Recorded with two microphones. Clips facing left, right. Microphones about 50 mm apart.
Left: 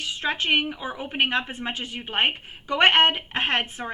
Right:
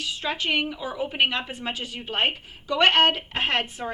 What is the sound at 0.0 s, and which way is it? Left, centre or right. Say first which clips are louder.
A woman's voice: left 1 dB; left.